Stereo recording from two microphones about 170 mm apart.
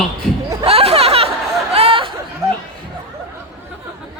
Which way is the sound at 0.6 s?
35° right (ahead or behind).